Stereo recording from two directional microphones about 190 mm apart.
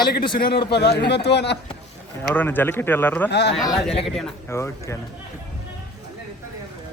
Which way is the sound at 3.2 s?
65° left (ahead or behind).